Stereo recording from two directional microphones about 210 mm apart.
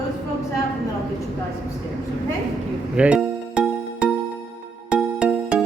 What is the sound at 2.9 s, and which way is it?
Music, 5° right (ahead or behind).